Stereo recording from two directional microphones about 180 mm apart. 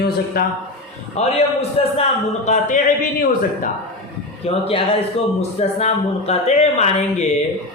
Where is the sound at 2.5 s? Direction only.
45° left (ahead or behind).